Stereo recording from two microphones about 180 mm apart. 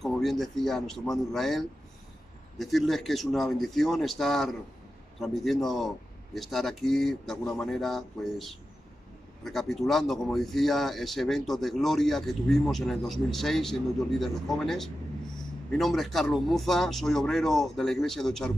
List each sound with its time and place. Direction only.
0.0 s a man's voice: centre (ahead or behind)